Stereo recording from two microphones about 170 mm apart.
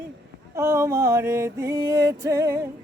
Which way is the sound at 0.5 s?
15° right (ahead or behind).